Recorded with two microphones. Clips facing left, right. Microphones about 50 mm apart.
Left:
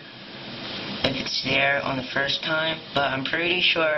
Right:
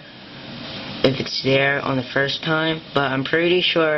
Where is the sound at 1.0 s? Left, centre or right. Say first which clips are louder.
Right 8 dB; centre.